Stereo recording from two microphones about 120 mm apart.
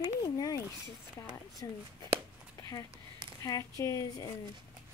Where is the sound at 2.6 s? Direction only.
30° left (ahead or behind).